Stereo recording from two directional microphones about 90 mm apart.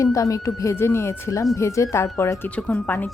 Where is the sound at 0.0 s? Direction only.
40° left (ahead or behind).